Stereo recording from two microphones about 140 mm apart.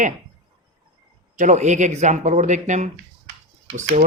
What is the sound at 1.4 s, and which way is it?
Speech, 55° right (ahead or behind).